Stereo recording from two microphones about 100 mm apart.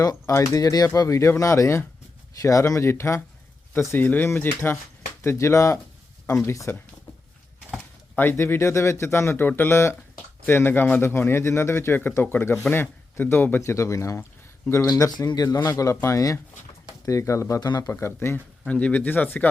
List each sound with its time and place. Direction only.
0.0 s a man's voice: 35° left (ahead or behind)
8.1 s a man's voice: 20° left (ahead or behind)
13.6 s speech: 30° left (ahead or behind)
18.6 s speech: 15° left (ahead or behind)